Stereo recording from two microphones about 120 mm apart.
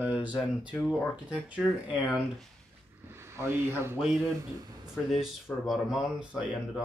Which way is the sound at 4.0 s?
5° right (ahead or behind).